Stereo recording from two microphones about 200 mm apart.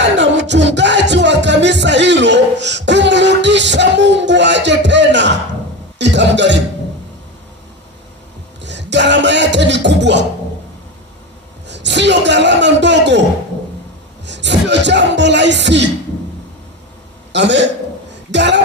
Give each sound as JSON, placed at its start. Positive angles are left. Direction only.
{"t": 0.0, "sound": "music", "side_deg": -65}
{"t": 6.0, "sound": "a man's voice", "side_deg": -60}
{"t": 8.6, "sound": "music", "side_deg": -60}
{"t": 11.7, "sound": "a man's voice", "side_deg": -60}
{"t": 14.3, "sound": "a man's voice", "side_deg": -60}
{"t": 17.3, "sound": "a man's voice", "side_deg": -60}